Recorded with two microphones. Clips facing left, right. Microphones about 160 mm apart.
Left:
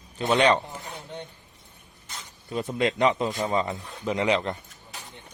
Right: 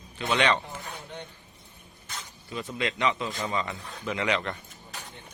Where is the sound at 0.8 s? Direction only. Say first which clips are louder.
Left 2 dB; 20° left (ahead or behind).